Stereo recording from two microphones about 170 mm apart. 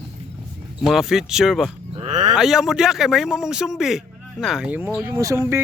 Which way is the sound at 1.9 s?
40° right (ahead or behind).